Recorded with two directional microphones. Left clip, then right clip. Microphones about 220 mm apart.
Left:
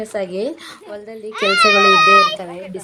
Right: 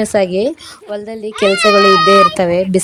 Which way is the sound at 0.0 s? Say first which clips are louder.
Right 9 dB; 30° right (ahead or behind).